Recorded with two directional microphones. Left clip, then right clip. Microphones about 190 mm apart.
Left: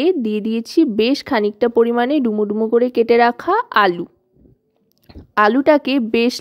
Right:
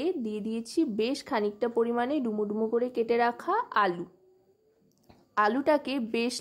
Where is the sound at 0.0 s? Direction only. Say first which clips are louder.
Left 14 dB; 40° left (ahead or behind).